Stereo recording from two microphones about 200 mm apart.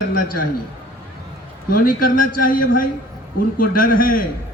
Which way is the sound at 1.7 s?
45° left (ahead or behind).